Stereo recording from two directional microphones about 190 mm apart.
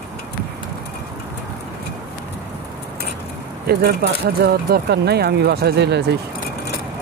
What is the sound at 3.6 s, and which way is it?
Speech, 55° right (ahead or behind).